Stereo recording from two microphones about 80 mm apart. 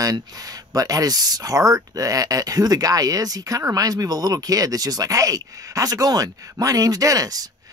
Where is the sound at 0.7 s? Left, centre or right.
Right.